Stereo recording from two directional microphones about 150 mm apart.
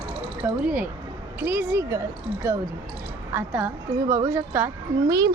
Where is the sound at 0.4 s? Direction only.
10° right (ahead or behind).